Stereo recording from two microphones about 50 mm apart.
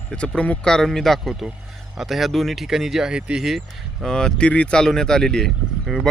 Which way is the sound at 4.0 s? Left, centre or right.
Centre.